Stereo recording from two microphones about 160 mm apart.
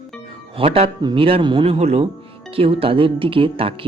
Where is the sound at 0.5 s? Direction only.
35° right (ahead or behind).